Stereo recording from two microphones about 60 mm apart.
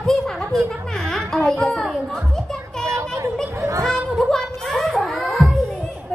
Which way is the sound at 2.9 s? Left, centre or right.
Right.